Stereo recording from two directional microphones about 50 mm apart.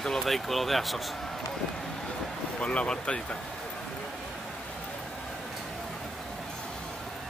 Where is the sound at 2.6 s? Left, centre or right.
Left.